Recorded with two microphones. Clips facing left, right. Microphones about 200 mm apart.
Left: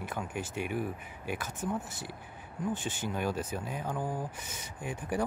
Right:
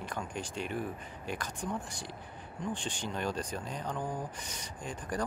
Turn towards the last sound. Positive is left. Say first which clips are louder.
# left 3 dB
turn(degrees=10)  # may be behind; listen again after turning